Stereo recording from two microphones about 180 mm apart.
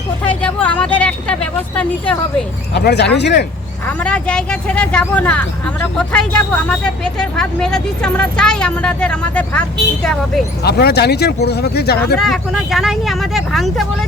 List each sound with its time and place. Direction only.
0.3 s speech: 10° left (ahead or behind)
2.7 s speech: 70° left (ahead or behind)
3.8 s speech: 5° left (ahead or behind)
10.6 s speech: 65° left (ahead or behind)
12.2 s speech: centre (ahead or behind)